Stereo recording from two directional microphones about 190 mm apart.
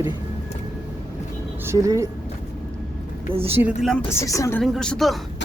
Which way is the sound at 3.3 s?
30° right (ahead or behind).